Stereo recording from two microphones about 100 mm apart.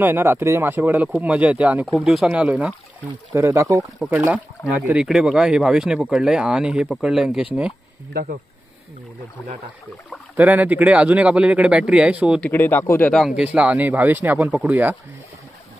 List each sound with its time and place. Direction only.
0.0 s speech: 25° right (ahead or behind)
2.0 s speech: centre (ahead or behind)
3.3 s speech: 25° right (ahead or behind)
4.3 s speech: 15° right (ahead or behind)
10.3 s speech: 15° right (ahead or behind)
12.4 s speech: 20° left (ahead or behind)
13.4 s speech: 10° right (ahead or behind)